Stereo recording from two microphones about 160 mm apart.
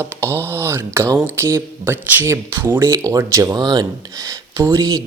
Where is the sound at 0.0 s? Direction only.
15° right (ahead or behind).